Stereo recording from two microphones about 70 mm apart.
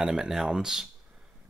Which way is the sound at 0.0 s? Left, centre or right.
Centre.